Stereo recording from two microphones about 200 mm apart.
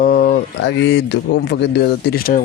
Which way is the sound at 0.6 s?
60° left (ahead or behind).